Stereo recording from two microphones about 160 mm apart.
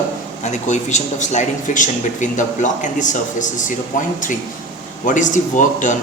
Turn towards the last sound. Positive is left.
turn(degrees=50)  # may be behind; listen again after turning